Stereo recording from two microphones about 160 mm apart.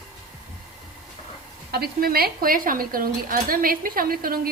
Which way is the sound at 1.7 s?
70° right (ahead or behind).